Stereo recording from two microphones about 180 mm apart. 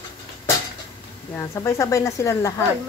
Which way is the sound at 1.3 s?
15° left (ahead or behind).